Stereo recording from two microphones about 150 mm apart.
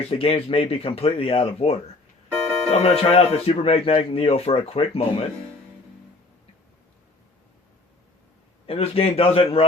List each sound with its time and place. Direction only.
0.1 s speech: 35° left (ahead or behind)
8.6 s speech: 40° left (ahead or behind)